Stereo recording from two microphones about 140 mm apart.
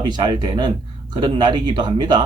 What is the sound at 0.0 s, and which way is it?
Speech, 35° right (ahead or behind).